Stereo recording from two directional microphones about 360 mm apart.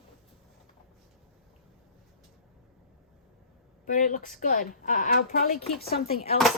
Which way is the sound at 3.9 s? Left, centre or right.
Left.